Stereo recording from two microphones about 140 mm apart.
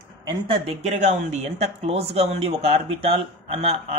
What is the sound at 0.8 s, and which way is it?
Speech, 55° right (ahead or behind).